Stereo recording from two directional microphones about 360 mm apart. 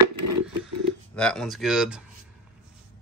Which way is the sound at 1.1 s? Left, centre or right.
Centre.